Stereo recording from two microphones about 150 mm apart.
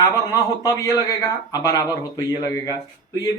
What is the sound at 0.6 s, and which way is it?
Speech, 20° left (ahead or behind).